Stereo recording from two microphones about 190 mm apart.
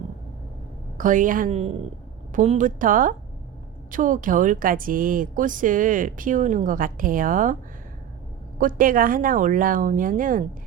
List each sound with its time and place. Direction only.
0.9 s speech: 45° right (ahead or behind)
8.5 s speech: 45° right (ahead or behind)